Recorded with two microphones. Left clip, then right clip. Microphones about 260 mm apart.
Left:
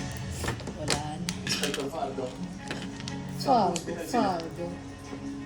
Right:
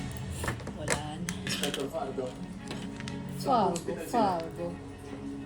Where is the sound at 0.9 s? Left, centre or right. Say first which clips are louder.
Left 2 dB; centre.